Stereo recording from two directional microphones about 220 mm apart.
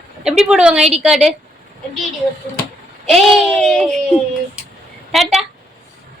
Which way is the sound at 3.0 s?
Centre (ahead or behind).